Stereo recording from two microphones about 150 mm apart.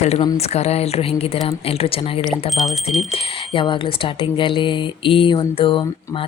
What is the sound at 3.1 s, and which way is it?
A woman's voice, 35° left (ahead or behind).